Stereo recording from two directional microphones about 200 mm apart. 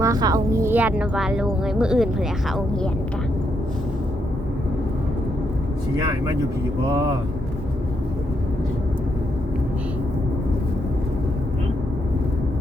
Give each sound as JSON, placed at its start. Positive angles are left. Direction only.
{"t": 0.0, "sound": "a woman's voice", "side_deg": -20}
{"t": 6.0, "sound": "speech", "side_deg": -20}